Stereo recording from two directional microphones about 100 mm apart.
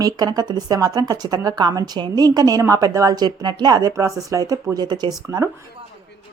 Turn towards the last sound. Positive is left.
turn(degrees=-40)  # may be behind; listen again after turning